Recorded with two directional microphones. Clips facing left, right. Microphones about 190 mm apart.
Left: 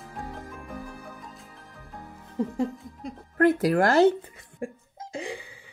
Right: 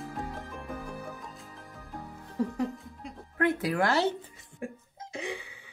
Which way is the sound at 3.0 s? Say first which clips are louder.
Left 7 dB; 40° left (ahead or behind).